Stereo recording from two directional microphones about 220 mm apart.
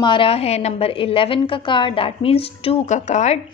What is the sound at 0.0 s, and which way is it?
Speech, 25° left (ahead or behind).